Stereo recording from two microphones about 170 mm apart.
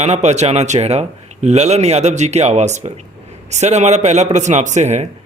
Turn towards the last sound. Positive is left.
turn(degrees=-45)  # may be behind; listen again after turning